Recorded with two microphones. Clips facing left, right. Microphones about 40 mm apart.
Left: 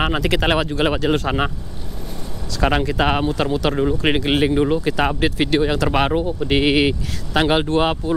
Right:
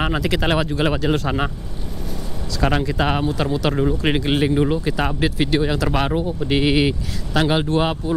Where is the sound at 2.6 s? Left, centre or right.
Centre.